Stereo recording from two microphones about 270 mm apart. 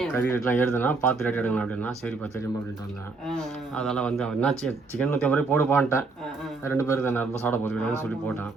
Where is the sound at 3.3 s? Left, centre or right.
Centre.